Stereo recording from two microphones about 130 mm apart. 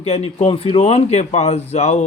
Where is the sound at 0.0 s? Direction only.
55° left (ahead or behind).